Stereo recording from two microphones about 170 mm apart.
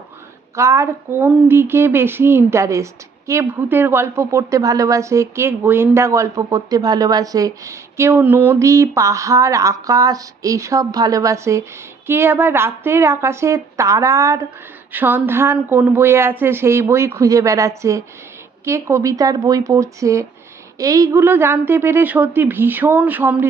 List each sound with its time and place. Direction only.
0.5 s speech: 15° right (ahead or behind)